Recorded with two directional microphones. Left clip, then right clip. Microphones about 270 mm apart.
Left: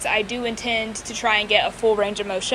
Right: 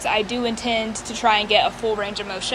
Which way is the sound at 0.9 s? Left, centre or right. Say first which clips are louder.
Right 2 dB; right.